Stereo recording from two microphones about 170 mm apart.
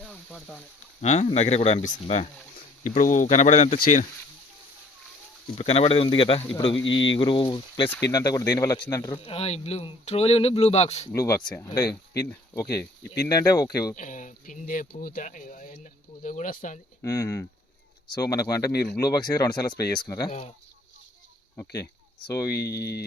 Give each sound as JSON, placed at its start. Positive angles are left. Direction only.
{"t": 0.0, "sound": "a sound", "side_deg": 5}
{"t": 1.0, "sound": "speech", "side_deg": 40}
{"t": 2.8, "sound": "speech", "side_deg": 50}
{"t": 5.5, "sound": "speech", "side_deg": 35}
{"t": 6.8, "sound": "speech", "side_deg": 90}
{"t": 7.1, "sound": "speech", "side_deg": 30}
{"t": 9.2, "sound": "speech", "side_deg": 35}
{"t": 11.1, "sound": "speech", "side_deg": 20}
{"t": 13.9, "sound": "speech", "side_deg": 50}
{"t": 17.0, "sound": "speech", "side_deg": 20}
{"t": 22.3, "sound": "speech", "side_deg": 20}
{"t": 22.5, "sound": "speech", "side_deg": 75}